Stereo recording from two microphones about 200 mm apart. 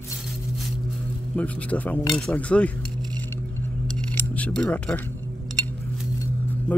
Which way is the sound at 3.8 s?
5° left (ahead or behind).